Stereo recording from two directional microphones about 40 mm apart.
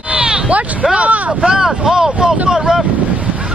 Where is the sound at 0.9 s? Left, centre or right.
Right.